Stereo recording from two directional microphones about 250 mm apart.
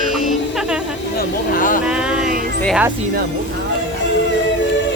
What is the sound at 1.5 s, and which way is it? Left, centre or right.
Vehicle, left.